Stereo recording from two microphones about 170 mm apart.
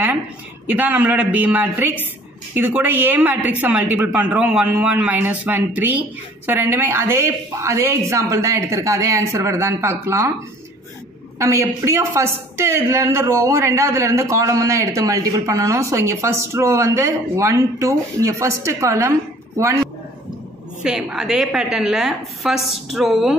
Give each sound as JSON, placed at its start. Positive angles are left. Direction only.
{"t": 0.7, "sound": "a woman's voice", "side_deg": -10}
{"t": 11.3, "sound": "a woman's voice", "side_deg": -15}
{"t": 20.8, "sound": "a woman's voice", "side_deg": -5}